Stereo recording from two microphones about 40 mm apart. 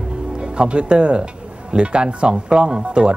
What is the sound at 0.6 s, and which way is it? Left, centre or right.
Speech, right.